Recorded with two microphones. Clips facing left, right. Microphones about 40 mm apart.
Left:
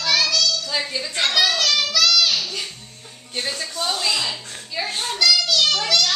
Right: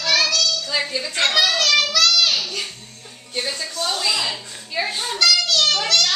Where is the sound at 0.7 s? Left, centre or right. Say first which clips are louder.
Right 2 dB; centre.